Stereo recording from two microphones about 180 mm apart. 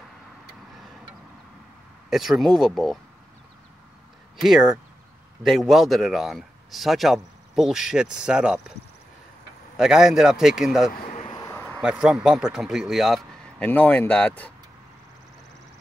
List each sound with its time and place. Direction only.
2.0 s speech: centre (ahead or behind)
4.4 s speech: 5° right (ahead or behind)
9.8 s speech: 5° right (ahead or behind)
10.9 s speech: 50° left (ahead or behind)
11.2 s a sound: 15° left (ahead or behind)
11.8 s speech: 5° right (ahead or behind)
13.7 s speech: 10° left (ahead or behind)